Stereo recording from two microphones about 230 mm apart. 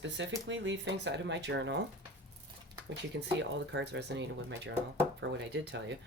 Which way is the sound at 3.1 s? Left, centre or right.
Right.